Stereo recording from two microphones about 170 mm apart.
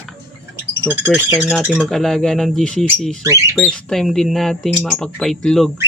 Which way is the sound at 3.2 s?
20° right (ahead or behind).